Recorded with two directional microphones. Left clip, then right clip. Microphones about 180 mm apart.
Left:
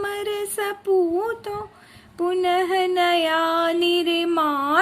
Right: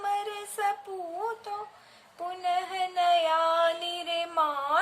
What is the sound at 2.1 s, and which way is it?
Music, 40° left (ahead or behind).